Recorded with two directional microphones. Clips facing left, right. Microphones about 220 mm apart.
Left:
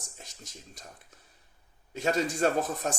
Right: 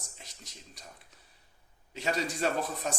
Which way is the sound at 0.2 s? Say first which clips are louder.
Left 3 dB; 45° left (ahead or behind).